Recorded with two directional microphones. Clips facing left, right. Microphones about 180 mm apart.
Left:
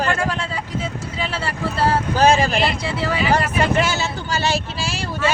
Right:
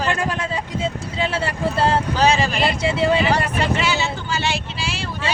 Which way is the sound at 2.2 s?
45° left (ahead or behind).